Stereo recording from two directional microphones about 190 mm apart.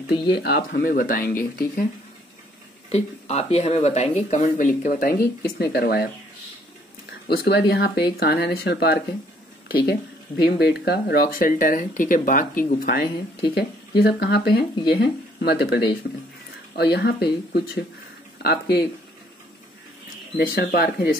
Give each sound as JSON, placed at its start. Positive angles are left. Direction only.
{"t": 0.3, "sound": "speech", "side_deg": 60}
{"t": 2.9, "sound": "speech", "side_deg": 35}
{"t": 7.4, "sound": "speech", "side_deg": 60}
{"t": 20.3, "sound": "speech", "side_deg": 55}